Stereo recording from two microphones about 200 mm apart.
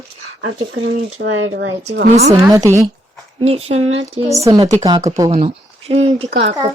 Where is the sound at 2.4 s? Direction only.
15° right (ahead or behind).